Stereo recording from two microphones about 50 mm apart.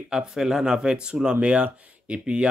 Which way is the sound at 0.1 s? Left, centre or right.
Centre.